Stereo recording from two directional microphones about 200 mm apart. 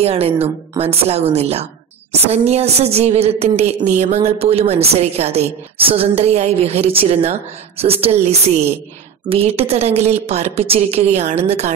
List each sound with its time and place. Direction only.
0.0 s a woman's voice: 30° right (ahead or behind)